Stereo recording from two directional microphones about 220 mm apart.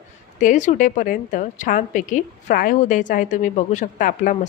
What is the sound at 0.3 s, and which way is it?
A woman's voice, 35° left (ahead or behind).